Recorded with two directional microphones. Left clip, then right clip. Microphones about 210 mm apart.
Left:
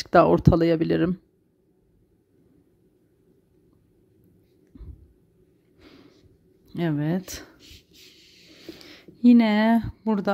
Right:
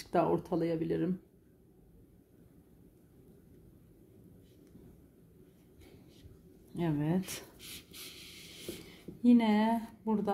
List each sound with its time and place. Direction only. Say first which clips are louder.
0.0 s speech: left 13 dB; 40° left (ahead or behind)
6.7 s speech: left 7 dB; 35° left (ahead or behind)
9.2 s speech: left 9 dB; 40° left (ahead or behind)